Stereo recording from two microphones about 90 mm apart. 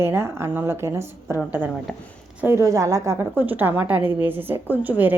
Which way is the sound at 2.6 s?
40° right (ahead or behind).